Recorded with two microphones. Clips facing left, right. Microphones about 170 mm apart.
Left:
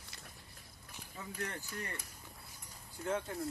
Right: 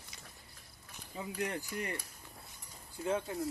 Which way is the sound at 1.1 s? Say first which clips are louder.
Right 6 dB; 15° right (ahead or behind).